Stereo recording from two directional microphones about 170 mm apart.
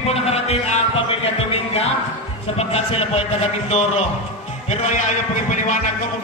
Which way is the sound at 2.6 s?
35° left (ahead or behind).